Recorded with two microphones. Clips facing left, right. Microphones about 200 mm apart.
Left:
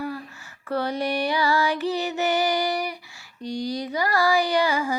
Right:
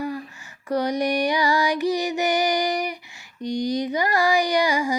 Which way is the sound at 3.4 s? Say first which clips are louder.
Right 4 dB; 15° right (ahead or behind).